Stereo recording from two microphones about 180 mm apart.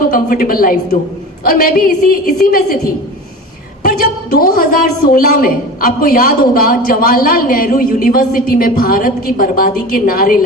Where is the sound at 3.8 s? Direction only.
55° left (ahead or behind).